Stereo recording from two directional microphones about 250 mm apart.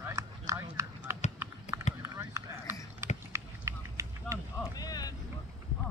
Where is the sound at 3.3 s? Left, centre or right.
Centre.